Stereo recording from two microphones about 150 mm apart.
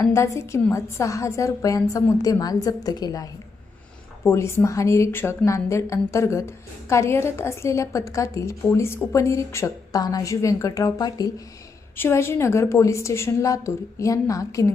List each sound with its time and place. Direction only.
0.0 s a woman's voice: 20° left (ahead or behind)